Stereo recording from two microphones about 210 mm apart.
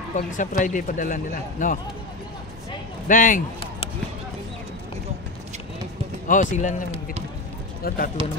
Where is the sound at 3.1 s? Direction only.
40° left (ahead or behind).